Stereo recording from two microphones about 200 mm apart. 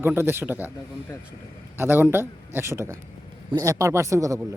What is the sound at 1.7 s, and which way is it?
A man's voice, 10° right (ahead or behind).